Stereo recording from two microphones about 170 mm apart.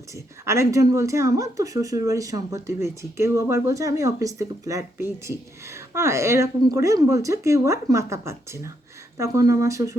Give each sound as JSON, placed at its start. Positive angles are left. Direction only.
{"t": 0.4, "sound": "speech", "side_deg": -15}